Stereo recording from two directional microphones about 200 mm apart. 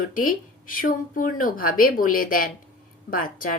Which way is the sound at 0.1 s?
45° left (ahead or behind).